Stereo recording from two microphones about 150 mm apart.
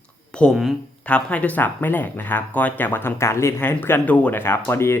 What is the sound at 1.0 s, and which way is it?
Speech, 10° left (ahead or behind).